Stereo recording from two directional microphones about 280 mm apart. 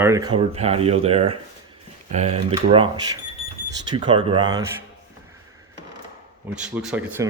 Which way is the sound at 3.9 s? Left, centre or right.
Centre.